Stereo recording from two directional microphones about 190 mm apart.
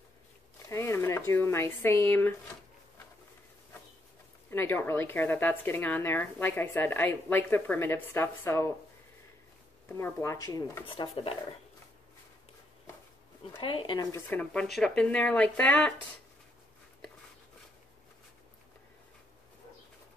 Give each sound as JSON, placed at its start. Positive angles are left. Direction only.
{"t": 0.7, "sound": "speech", "side_deg": 15}
{"t": 4.5, "sound": "speech", "side_deg": 10}
{"t": 9.8, "sound": "speech", "side_deg": 10}
{"t": 10.9, "sound": "speech", "side_deg": 30}
{"t": 13.6, "sound": "speech", "side_deg": 25}